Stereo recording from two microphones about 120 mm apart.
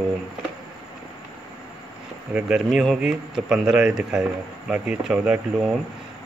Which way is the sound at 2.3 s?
5° right (ahead or behind).